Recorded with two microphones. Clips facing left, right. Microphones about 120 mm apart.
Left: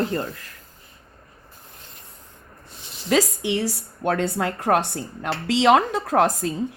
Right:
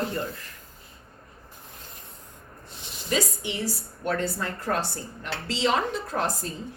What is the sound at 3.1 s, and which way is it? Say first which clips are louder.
A woman's voice: left 7 dB; 90° left.